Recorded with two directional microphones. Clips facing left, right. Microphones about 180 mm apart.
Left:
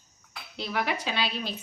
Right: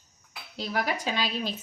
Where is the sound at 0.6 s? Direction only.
40° right (ahead or behind).